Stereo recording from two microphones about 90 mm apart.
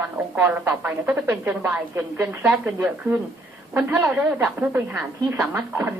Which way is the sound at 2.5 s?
15° right (ahead or behind).